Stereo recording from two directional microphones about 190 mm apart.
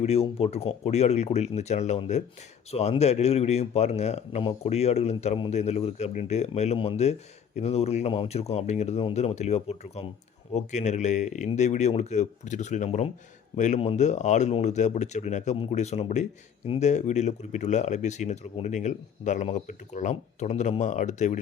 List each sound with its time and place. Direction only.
0.0 s speech: 30° left (ahead or behind)